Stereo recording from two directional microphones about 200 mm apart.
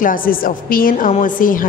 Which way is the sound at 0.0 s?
45° left (ahead or behind).